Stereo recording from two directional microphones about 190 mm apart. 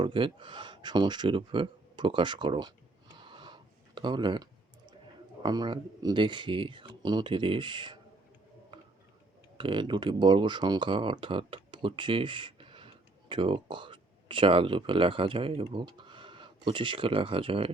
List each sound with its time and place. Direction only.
0.0 s speech: 25° right (ahead or behind)
3.2 s a sound: 25° right (ahead or behind)
5.4 s speech: 20° right (ahead or behind)
9.6 s speech: 25° right (ahead or behind)